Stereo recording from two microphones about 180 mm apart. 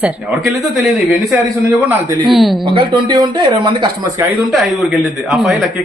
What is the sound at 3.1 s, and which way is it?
Speech, 25° right (ahead or behind).